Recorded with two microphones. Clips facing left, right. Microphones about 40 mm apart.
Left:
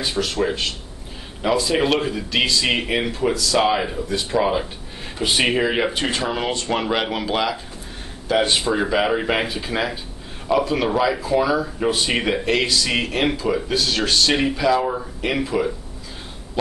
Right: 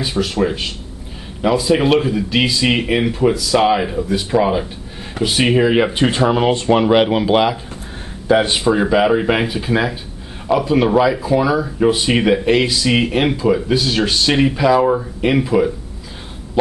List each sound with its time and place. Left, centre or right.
0.0 s speech: centre
5.9 s speech: centre